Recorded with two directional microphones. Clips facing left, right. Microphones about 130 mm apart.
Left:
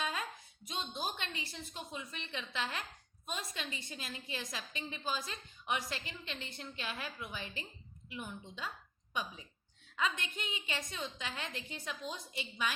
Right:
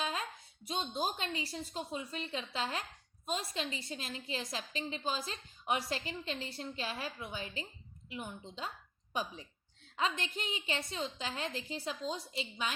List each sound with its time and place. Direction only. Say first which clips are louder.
0.0 s a woman's voice: right 1 dB; 30° right (ahead or behind)